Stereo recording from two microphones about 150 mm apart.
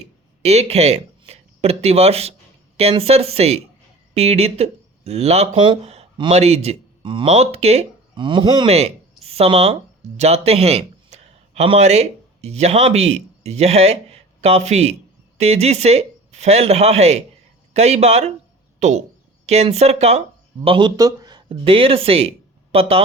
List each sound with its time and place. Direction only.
0.4 s speech: 45° right (ahead or behind)
8.6 s speech: 45° right (ahead or behind)
20.7 s speech: 30° right (ahead or behind)